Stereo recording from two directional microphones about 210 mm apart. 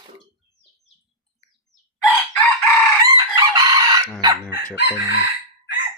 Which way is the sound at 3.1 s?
20° right (ahead or behind).